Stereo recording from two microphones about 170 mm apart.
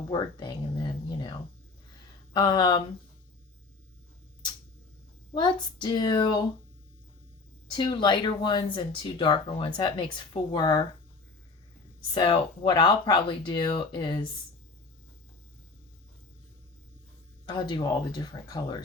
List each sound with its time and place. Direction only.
0.1 s speech: 25° left (ahead or behind)
2.3 s speech: 25° left (ahead or behind)
5.3 s speech: 25° left (ahead or behind)
7.7 s speech: 30° left (ahead or behind)
12.1 s speech: 30° left (ahead or behind)
17.4 s speech: 25° left (ahead or behind)